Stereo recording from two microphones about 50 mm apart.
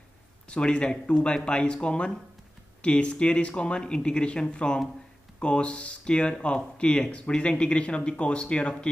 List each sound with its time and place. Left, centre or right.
0.5 s speech: centre